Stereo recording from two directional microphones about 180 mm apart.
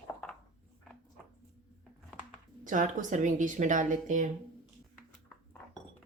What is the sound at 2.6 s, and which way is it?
A woman's voice, 45° right (ahead or behind).